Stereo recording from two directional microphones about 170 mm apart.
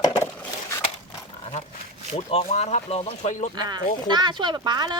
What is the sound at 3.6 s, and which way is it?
Speech, 25° right (ahead or behind).